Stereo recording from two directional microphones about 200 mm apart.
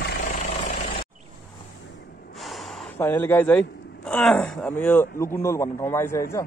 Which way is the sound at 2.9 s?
10° left (ahead or behind).